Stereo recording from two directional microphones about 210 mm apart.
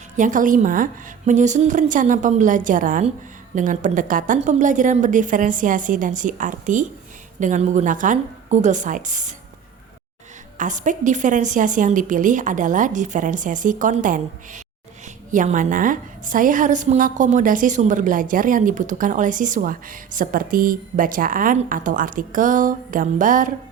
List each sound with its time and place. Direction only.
0.2 s a woman's voice: 40° right (ahead or behind)
10.6 s a woman's voice: 35° right (ahead or behind)